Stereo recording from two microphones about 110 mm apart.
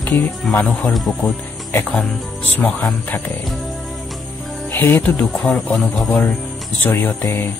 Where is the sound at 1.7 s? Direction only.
15° left (ahead or behind).